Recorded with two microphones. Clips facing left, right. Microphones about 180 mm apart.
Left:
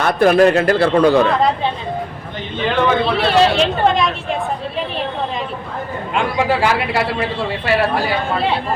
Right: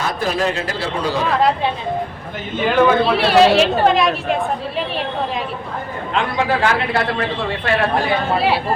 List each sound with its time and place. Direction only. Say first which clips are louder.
0.0 s a man's voice: left 8 dB; 60° left (ahead or behind)
2.6 s speech: right 2 dB; 5° right (ahead or behind)
6.1 s a man's voice: left 2 dB; 10° left (ahead or behind)